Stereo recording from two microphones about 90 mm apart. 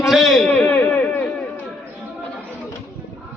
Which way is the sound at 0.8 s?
20° left (ahead or behind).